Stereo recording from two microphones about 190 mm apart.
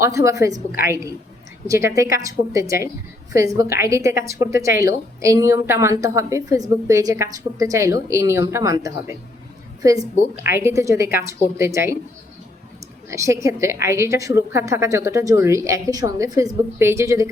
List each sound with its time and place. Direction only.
0.0 s a woman's voice: 15° right (ahead or behind)
1.6 s a woman's voice: 15° right (ahead or behind)
13.1 s a woman's voice: 15° right (ahead or behind)